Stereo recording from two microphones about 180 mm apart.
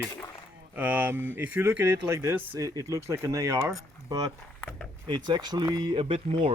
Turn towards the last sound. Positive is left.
turn(degrees=-30)  # may be behind; listen again after turning